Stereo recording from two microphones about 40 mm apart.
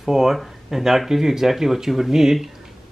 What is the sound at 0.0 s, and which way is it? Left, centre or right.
Speech, centre.